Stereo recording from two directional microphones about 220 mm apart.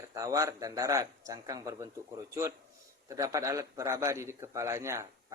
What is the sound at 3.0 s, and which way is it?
Speech, 15° right (ahead or behind).